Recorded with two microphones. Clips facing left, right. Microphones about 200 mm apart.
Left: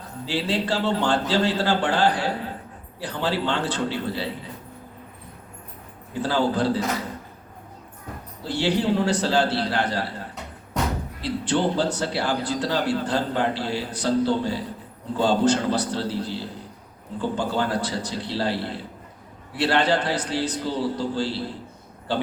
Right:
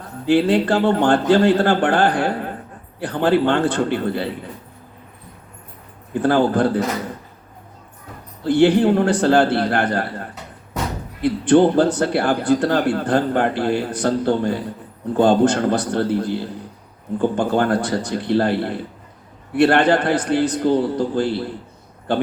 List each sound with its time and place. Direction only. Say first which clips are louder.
0.3 s a man's voice: right 10 dB; 55° right (ahead or behind)
6.1 s a man's voice: right 6 dB; 55° right (ahead or behind)
8.4 s a man's voice: right 9 dB; 55° right (ahead or behind)